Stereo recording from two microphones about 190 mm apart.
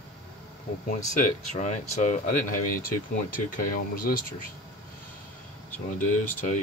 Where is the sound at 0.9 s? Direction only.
40° left (ahead or behind).